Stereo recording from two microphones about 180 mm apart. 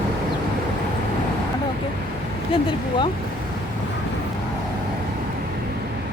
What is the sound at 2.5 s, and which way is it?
Speech, 30° left (ahead or behind).